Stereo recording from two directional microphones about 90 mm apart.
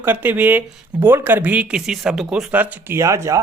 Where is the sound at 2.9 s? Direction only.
30° right (ahead or behind).